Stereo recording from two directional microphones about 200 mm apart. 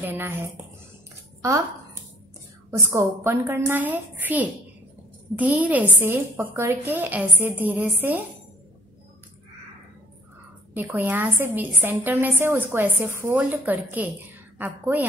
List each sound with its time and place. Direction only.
0.0 s a woman's voice: 10° right (ahead or behind)
2.9 s a woman's voice: 15° right (ahead or behind)
10.7 s a woman's voice: 10° right (ahead or behind)